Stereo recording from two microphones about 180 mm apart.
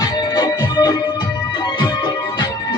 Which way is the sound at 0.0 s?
20° left (ahead or behind).